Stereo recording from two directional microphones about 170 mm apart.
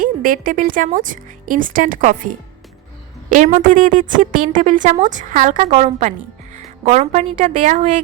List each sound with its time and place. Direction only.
0.0 s a woman's voice: 55° right (ahead or behind)